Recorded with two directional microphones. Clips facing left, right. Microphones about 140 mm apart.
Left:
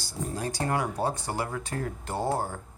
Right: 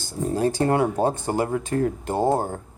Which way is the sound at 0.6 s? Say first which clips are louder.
Right 7 dB; 30° right (ahead or behind).